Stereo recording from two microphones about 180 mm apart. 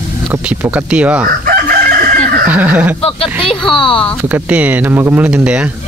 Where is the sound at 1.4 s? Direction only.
55° right (ahead or behind).